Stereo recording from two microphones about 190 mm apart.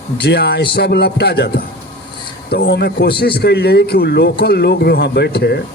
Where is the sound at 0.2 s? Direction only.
60° left (ahead or behind).